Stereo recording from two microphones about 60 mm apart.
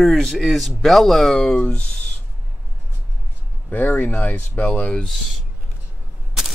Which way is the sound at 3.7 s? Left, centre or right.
Left.